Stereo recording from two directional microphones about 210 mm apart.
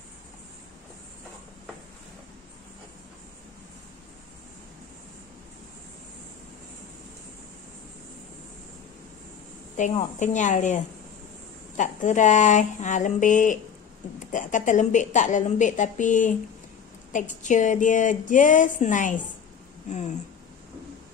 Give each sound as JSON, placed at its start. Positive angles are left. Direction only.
{"t": 9.8, "sound": "a woman's voice", "side_deg": 35}